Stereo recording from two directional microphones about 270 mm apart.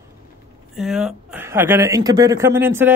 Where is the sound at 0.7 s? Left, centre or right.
Centre.